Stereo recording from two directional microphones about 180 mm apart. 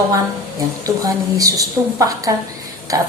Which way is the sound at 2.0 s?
20° right (ahead or behind).